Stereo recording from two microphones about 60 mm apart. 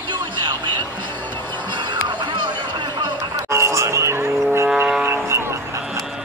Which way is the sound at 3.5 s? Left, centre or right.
Right.